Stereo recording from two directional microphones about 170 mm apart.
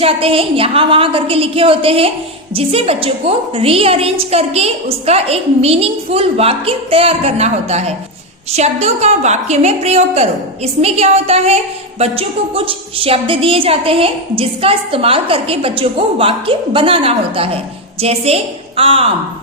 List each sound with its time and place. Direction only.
0.0 s a woman's voice: 35° right (ahead or behind)